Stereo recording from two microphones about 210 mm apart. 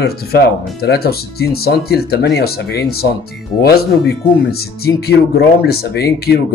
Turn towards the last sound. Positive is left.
turn(degrees=50)  # may be behind; listen again after turning